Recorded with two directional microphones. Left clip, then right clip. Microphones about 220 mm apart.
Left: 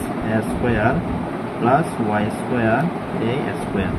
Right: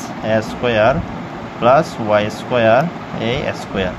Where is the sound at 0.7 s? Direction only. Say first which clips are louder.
Right 7 dB; 25° right (ahead or behind).